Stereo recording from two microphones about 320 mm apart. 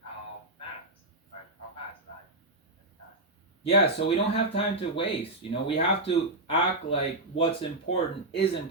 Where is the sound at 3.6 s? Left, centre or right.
Centre.